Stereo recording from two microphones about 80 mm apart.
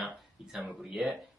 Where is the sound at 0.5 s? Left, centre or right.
Centre.